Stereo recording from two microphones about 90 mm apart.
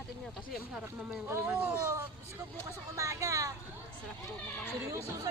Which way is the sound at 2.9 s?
35° right (ahead or behind).